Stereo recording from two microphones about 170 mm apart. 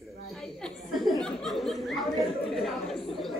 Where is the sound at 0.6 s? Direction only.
Centre (ahead or behind).